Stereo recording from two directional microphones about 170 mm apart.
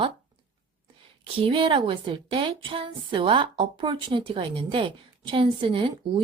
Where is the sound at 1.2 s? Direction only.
30° right (ahead or behind).